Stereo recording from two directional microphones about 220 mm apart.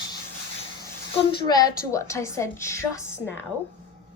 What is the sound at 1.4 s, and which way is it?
A woman's voice, 15° left (ahead or behind).